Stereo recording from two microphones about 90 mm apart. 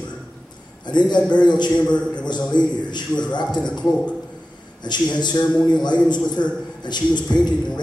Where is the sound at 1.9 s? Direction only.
10° left (ahead or behind).